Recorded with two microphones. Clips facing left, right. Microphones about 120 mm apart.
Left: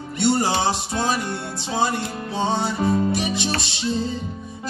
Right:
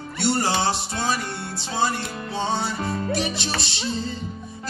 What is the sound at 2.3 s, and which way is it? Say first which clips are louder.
Music: left 3 dB; 15° left (ahead or behind).